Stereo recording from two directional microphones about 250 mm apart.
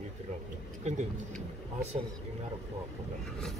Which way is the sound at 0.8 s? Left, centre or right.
Right.